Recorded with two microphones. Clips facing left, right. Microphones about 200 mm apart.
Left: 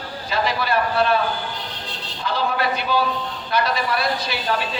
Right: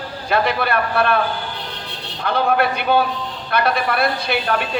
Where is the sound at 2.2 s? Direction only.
60° right (ahead or behind).